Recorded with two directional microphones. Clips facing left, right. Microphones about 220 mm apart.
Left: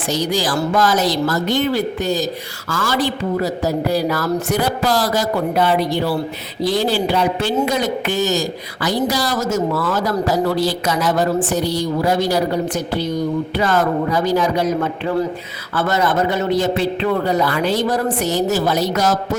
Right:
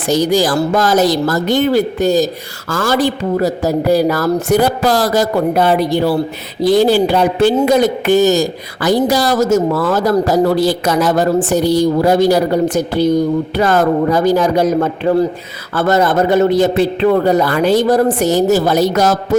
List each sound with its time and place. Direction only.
0.1 s speech: 45° right (ahead or behind)